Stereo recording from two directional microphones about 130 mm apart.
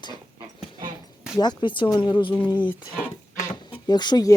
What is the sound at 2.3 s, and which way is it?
Speech, 10° left (ahead or behind).